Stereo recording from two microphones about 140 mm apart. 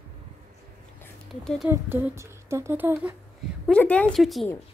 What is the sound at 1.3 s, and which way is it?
Speech, centre (ahead or behind).